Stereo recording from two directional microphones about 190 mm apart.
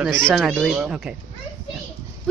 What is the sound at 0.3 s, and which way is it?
Speech, centre (ahead or behind).